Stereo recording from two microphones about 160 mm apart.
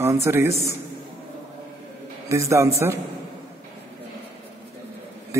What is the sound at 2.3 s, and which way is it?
Speech, 20° right (ahead or behind).